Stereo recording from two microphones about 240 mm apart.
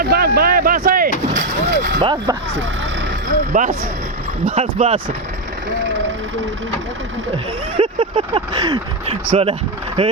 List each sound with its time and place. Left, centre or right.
0.0 s a sound: right
1.4 s mechanisms: right
2.0 s speech: centre
3.5 s speech: right
7.8 s speech: right